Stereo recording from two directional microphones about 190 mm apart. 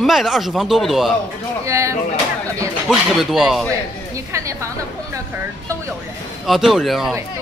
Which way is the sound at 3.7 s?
15° right (ahead or behind).